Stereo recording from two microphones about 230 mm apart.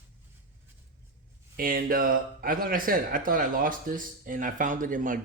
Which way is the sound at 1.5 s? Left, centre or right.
Right.